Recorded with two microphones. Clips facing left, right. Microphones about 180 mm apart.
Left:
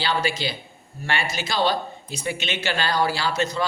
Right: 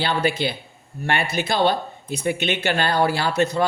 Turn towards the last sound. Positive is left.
turn(degrees=-60)  # may be behind; listen again after turning